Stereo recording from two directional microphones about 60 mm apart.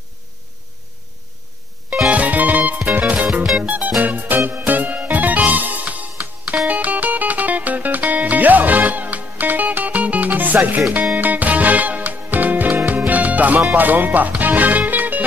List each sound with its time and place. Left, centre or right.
2.0 s music: right
13.7 s speech: right
14.9 s music: right